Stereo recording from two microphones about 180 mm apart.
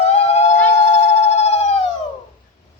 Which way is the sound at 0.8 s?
35° left (ahead or behind).